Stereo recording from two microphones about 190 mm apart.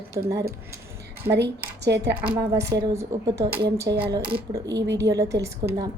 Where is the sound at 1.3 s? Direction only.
60° right (ahead or behind).